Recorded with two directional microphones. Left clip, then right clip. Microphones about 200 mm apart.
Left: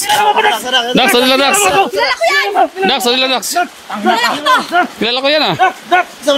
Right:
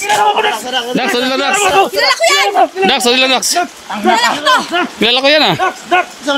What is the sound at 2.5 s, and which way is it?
Speech, 10° right (ahead or behind).